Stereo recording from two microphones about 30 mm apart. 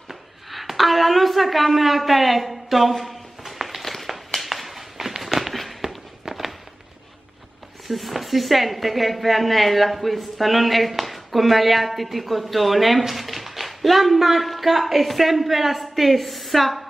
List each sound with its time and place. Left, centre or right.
0.1 s a woman's voice: centre
3.6 s a sound: centre
5.8 s walk: right
7.9 s speech: centre